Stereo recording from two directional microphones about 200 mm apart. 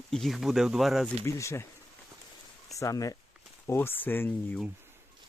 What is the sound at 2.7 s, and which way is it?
Speech, 15° left (ahead or behind).